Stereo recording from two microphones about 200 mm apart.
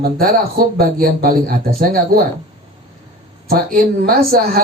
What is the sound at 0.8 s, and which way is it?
Speech, 50° right (ahead or behind).